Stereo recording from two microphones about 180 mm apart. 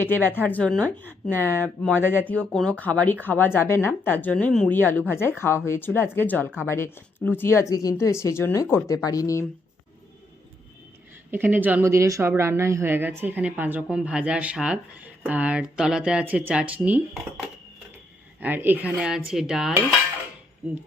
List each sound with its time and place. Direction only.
0.0 s speech: 10° left (ahead or behind)
11.3 s a woman's voice: 10° right (ahead or behind)
18.3 s a woman's voice: 10° right (ahead or behind)